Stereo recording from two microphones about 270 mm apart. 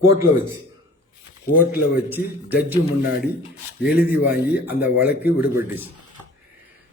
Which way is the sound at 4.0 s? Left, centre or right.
Centre.